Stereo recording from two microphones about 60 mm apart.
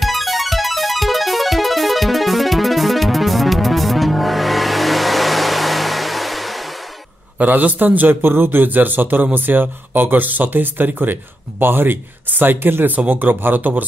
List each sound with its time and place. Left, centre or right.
0.0 s music: centre
7.3 s a man's voice: right